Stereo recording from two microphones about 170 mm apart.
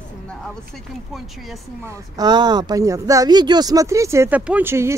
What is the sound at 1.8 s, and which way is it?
Speech, 20° right (ahead or behind).